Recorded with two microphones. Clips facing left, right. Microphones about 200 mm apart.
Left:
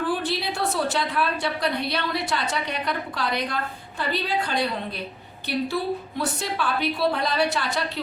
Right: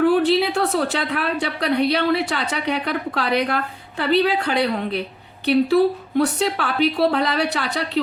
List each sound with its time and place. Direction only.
0.0 s a woman's voice: 65° right (ahead or behind)